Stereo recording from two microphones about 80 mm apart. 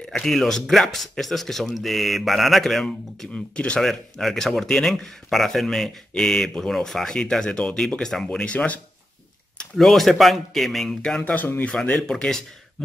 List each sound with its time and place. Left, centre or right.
0.2 s speech: centre
9.6 s speech: centre